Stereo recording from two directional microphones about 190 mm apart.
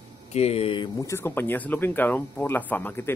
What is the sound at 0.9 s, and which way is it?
Speech, 15° left (ahead or behind).